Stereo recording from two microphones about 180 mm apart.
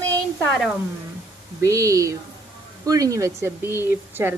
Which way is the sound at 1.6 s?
20° right (ahead or behind).